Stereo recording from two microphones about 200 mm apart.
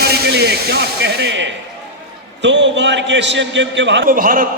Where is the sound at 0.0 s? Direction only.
55° right (ahead or behind).